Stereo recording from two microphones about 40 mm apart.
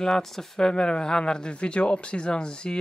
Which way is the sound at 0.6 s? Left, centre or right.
Centre.